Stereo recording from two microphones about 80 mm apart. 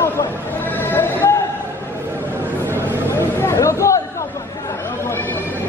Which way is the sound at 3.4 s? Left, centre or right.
Left.